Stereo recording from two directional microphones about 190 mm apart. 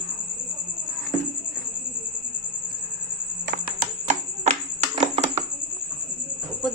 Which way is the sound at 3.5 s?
45° right (ahead or behind).